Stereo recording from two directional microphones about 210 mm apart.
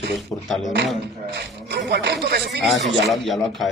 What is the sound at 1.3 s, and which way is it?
Speech, 55° right (ahead or behind).